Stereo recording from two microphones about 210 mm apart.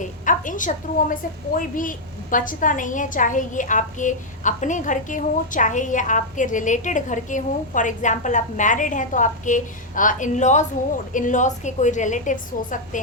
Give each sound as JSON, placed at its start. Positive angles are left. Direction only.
{"t": 0.0, "sound": "a woman's voice", "side_deg": 40}